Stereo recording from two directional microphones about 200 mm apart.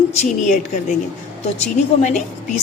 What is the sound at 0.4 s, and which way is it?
A woman's voice, 40° left (ahead or behind).